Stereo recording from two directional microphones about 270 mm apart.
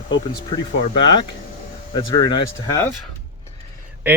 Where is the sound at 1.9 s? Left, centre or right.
Centre.